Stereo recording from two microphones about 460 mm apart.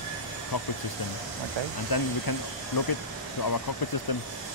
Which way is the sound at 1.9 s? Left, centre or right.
Left.